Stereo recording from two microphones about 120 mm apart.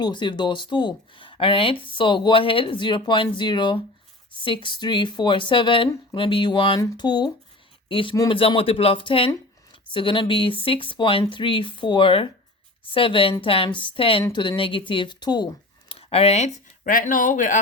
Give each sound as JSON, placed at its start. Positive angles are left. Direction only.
{"t": 0.0, "sound": "speech", "side_deg": 40}
{"t": 7.9, "sound": "speech", "side_deg": 50}
{"t": 15.9, "sound": "speech", "side_deg": 55}